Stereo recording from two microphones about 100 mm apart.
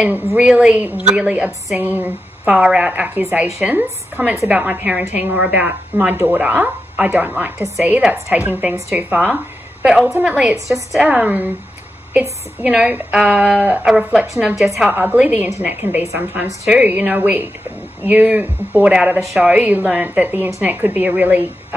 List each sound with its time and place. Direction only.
0.3 s a woman's voice: 10° right (ahead or behind)